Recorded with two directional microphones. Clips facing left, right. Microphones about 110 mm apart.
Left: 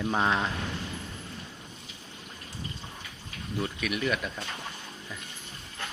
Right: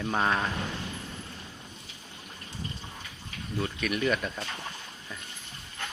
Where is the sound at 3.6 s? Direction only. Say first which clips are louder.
Right 1 dB; 5° left (ahead or behind).